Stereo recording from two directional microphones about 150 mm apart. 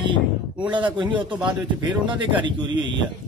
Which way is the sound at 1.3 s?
30° right (ahead or behind).